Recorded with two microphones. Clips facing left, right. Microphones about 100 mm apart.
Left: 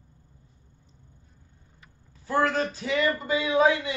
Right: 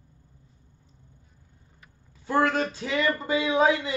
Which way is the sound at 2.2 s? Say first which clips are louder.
Right 1 dB; 25° right (ahead or behind).